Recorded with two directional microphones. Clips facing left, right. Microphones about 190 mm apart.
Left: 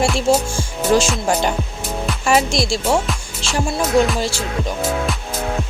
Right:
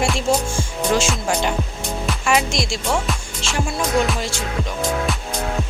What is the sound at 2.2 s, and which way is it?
Music, 35° left (ahead or behind).